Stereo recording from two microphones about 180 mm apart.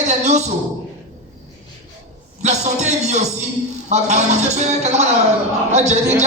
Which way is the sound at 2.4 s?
40° right (ahead or behind).